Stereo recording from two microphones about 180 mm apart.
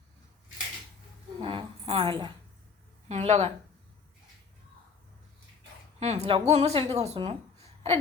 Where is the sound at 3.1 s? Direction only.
40° right (ahead or behind).